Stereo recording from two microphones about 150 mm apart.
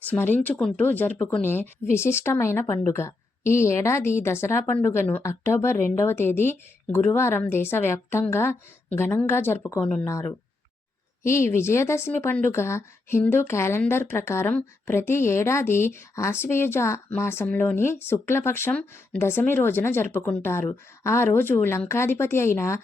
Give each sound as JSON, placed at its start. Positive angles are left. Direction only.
{"t": 0.1, "sound": "speech", "side_deg": 10}
{"t": 9.8, "sound": "speech", "side_deg": 5}
{"t": 10.1, "sound": "speech", "side_deg": 20}